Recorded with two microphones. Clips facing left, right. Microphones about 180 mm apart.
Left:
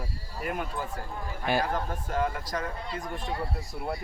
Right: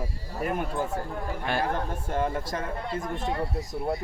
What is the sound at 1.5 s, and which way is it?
Speech, 5° left (ahead or behind).